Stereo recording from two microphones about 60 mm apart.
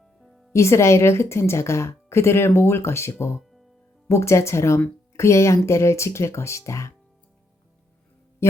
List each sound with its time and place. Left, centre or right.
0.2 s music: centre
0.5 s a woman's voice: left